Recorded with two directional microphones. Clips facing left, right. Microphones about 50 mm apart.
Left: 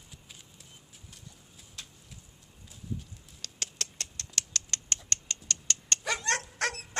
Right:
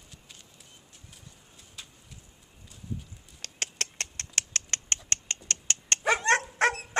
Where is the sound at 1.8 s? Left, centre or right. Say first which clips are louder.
Even; centre.